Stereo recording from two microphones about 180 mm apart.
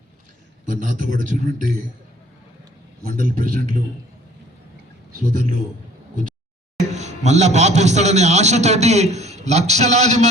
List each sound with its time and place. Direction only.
0.6 s a man's voice: 45° right (ahead or behind)
3.2 s a man's voice: 50° right (ahead or behind)
5.2 s a man's voice: 45° right (ahead or behind)
6.9 s a man's voice: 40° right (ahead or behind)